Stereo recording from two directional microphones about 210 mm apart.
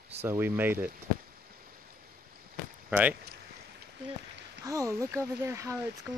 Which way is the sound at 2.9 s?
5° right (ahead or behind).